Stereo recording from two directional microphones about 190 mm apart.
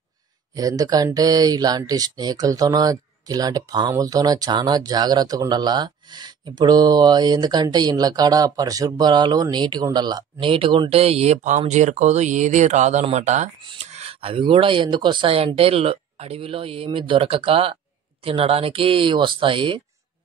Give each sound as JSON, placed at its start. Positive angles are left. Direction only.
{"t": 0.6, "sound": "speech", "side_deg": -20}
{"t": 13.6, "sound": "a sound", "side_deg": -30}
{"t": 14.5, "sound": "speech", "side_deg": -25}